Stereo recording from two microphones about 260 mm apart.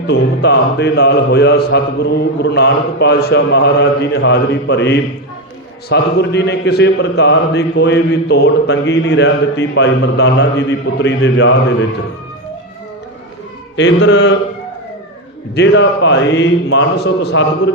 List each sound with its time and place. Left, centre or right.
0.1 s a man's voice: left
13.7 s a man's voice: left
15.5 s a man's voice: left